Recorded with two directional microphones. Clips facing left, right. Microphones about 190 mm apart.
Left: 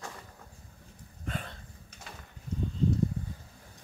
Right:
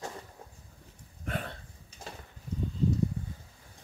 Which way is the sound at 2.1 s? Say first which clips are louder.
Right 4 dB; 35° right (ahead or behind).